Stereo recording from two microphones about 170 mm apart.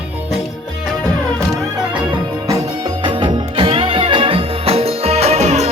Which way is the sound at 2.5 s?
20° right (ahead or behind).